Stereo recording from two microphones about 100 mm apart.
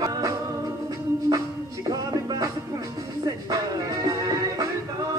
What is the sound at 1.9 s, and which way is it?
Music, 40° right (ahead or behind).